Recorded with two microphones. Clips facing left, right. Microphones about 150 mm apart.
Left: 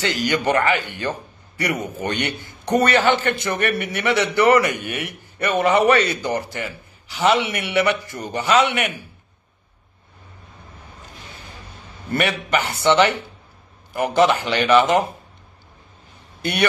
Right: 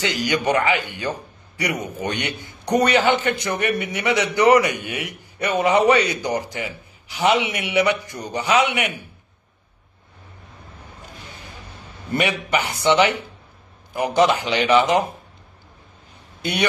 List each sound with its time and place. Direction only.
0.0 s a man's voice: 15° right (ahead or behind)
12.1 s a man's voice: 15° right (ahead or behind)